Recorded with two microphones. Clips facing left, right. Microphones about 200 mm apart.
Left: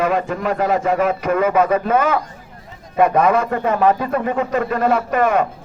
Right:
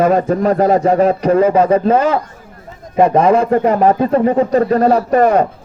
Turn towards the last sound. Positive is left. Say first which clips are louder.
# right 5 dB
turn(degrees=-35)  # may be behind; listen again after turning